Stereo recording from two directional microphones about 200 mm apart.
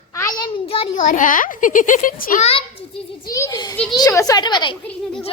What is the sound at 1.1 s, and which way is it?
A child's voice, 40° left (ahead or behind).